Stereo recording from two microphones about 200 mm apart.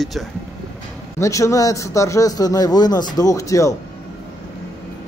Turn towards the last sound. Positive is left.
turn(degrees=15)  # may be behind; listen again after turning